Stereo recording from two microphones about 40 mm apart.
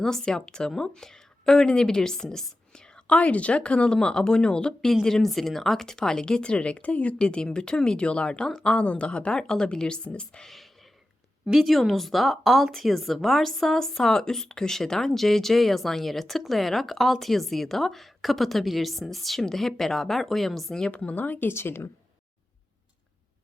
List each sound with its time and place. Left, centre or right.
0.0 s a woman's voice: centre
5.0 s speech: centre; by 7.2 s left
7.2 s speech: left
9.4 s speech: centre
10.4 s speech: centre
21.0 s speech: left
21.4 s speech: left